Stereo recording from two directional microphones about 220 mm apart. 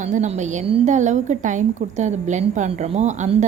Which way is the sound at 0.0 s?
35° right (ahead or behind).